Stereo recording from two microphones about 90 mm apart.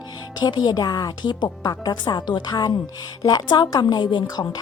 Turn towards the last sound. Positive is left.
turn(degrees=60)  # may be behind; listen again after turning